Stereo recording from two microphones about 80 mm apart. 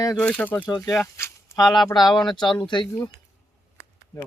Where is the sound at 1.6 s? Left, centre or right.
Centre.